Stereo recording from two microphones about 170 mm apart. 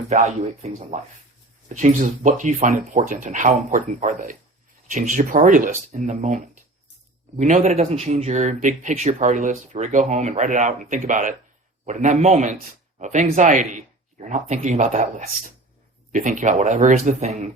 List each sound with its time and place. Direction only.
0.1 s speech: 40° right (ahead or behind)